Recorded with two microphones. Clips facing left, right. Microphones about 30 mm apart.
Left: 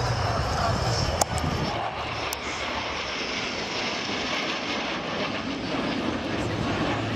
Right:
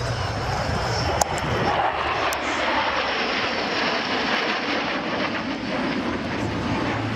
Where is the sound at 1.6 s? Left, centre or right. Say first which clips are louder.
Right 7 dB; right.